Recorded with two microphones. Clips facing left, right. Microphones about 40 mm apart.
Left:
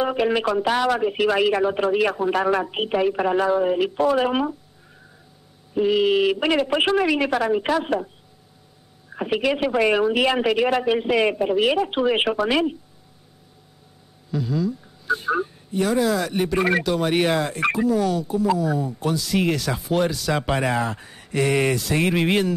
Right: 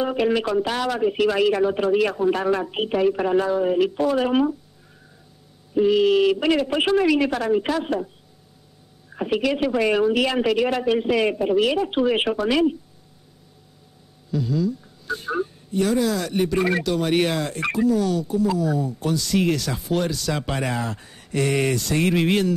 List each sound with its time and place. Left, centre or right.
0.0 s speech: centre
4.0 s speech: left
5.8 s speech: centre
9.1 s speech: centre
14.3 s speech: centre